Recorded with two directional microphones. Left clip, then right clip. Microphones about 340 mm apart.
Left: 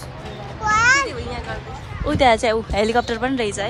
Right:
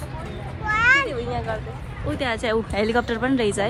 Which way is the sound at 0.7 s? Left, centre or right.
Centre.